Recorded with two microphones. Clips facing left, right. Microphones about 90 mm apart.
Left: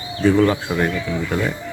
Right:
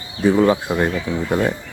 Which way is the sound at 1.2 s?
35° right (ahead or behind).